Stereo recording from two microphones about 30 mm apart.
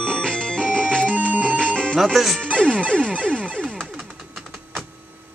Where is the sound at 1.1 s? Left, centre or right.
Right.